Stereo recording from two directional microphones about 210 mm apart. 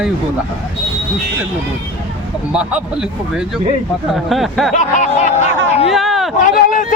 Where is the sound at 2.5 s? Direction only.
5° right (ahead or behind).